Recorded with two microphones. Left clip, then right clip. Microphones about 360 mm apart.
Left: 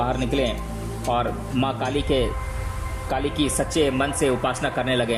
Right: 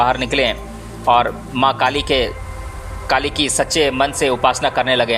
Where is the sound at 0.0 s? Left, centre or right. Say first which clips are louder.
Right 8 dB; centre.